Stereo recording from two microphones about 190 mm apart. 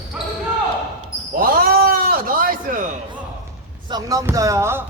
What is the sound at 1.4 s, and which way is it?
Basketball bounce, 50° right (ahead or behind).